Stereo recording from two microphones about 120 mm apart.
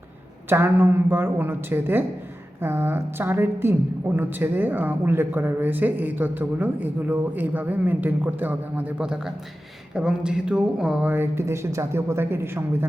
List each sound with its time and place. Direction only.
0.5 s a woman's voice: 20° right (ahead or behind)